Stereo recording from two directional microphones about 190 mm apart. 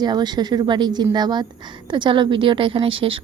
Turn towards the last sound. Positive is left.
turn(degrees=-30)  # may be behind; listen again after turning